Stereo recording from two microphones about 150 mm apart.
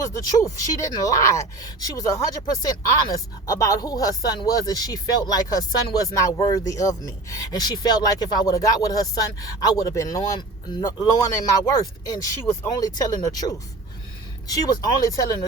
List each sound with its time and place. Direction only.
0.0 s speech: 20° left (ahead or behind)